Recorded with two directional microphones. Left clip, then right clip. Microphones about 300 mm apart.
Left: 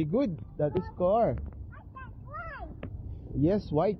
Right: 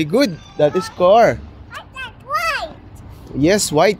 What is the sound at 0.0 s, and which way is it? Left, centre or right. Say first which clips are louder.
Speech: right 13 dB; right.